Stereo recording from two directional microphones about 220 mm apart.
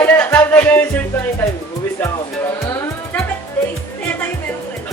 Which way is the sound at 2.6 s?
15° left (ahead or behind).